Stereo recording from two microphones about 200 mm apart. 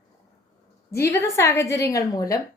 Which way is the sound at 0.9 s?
15° left (ahead or behind).